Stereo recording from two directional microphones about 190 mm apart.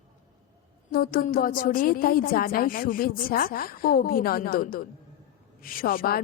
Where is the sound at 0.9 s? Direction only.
50° left (ahead or behind).